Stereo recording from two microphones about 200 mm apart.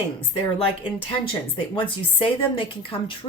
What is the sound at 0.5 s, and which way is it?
Speech, 25° left (ahead or behind).